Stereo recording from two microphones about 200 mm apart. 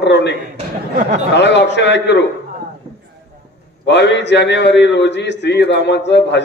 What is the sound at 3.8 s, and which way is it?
A man's voice, 60° left (ahead or behind).